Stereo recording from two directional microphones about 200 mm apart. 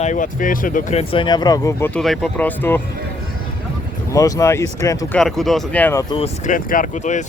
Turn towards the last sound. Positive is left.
turn(degrees=35)  # may be behind; listen again after turning